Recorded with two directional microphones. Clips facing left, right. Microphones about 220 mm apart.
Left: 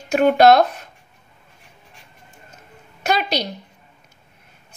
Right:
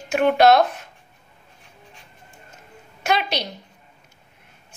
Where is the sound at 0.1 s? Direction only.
40° left (ahead or behind).